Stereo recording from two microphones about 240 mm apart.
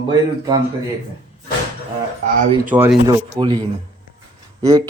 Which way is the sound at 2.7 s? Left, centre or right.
Centre.